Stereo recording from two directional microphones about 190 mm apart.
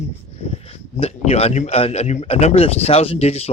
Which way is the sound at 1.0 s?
35° left (ahead or behind).